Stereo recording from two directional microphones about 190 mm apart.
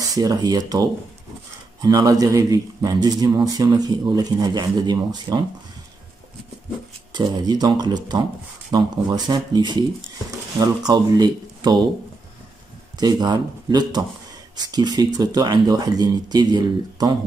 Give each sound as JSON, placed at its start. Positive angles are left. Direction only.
{"t": 0.0, "sound": "a man's voice", "side_deg": -20}
{"t": 7.2, "sound": "a man's voice", "side_deg": -20}
{"t": 13.0, "sound": "a man's voice", "side_deg": -20}